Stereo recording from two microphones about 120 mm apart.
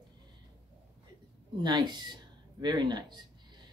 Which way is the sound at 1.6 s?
40° right (ahead or behind).